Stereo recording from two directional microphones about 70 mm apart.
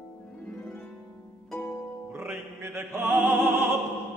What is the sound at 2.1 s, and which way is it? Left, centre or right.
Music, right.